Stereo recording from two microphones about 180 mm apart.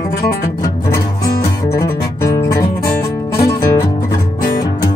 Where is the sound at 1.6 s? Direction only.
15° left (ahead or behind).